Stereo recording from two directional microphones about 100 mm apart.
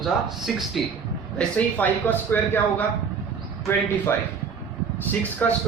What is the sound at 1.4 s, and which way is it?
Speech, 15° left (ahead or behind).